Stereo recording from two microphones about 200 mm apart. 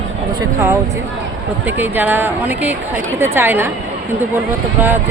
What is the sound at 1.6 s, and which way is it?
Speech, 10° right (ahead or behind).